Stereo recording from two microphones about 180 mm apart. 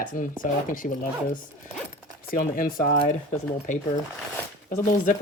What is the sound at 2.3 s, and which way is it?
Speech, 55° left (ahead or behind).